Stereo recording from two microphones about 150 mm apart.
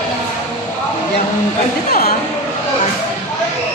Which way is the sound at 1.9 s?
75° left (ahead or behind).